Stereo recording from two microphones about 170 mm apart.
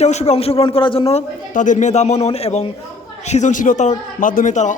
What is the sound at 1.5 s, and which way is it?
A man's voice, 50° left (ahead or behind).